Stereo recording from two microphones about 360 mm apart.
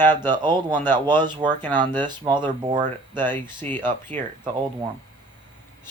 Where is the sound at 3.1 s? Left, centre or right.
Centre.